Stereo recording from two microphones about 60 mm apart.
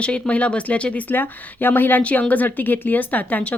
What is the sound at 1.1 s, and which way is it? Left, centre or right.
A woman's voice, left.